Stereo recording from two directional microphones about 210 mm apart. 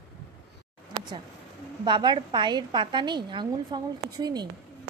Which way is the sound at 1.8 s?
20° right (ahead or behind).